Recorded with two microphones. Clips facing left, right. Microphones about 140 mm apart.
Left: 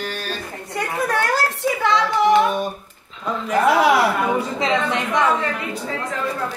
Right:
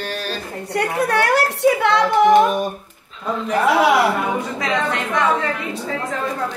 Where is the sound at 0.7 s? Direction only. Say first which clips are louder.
Right 3 dB; 70° right (ahead or behind); by 2.5 s 50° right (ahead or behind).